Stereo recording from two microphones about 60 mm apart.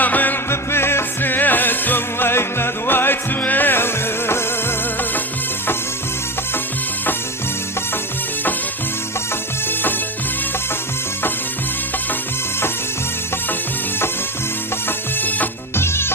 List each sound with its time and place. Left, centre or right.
0.0 s music: left
0.5 s music: left
14.8 s music: left
15.7 s music: left